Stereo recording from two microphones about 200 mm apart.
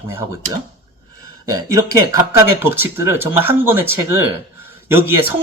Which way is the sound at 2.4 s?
10° right (ahead or behind).